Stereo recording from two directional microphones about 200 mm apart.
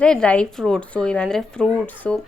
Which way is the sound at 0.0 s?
5° left (ahead or behind).